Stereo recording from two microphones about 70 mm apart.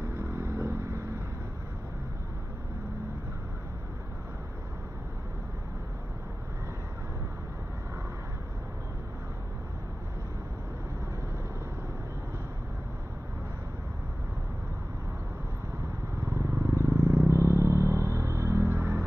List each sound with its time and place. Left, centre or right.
0.0 s vehicle: right
16.2 s vehicle: right
17.3 s a sound: right